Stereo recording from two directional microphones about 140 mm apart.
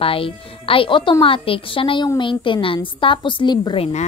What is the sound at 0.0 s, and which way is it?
A woman's voice, 40° left (ahead or behind).